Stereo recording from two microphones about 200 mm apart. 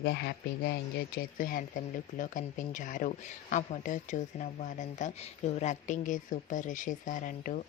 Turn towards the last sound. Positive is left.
turn(degrees=40)  # may be behind; listen again after turning